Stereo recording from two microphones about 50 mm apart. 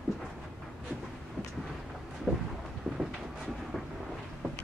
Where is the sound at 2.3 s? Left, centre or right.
Centre.